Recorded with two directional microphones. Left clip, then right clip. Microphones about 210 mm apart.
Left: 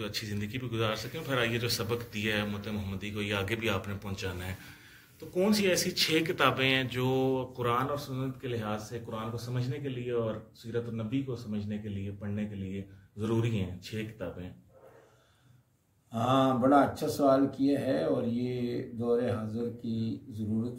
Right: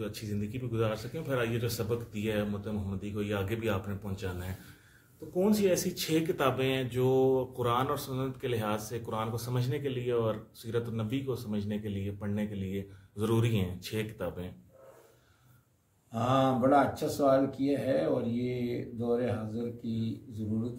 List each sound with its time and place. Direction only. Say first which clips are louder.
0.0 s speech: left 2 dB; 40° right (ahead or behind)
16.1 s speech: left 1 dB; 5° left (ahead or behind)